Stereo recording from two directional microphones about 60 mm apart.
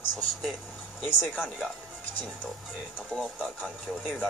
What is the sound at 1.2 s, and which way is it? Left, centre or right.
Speech, centre.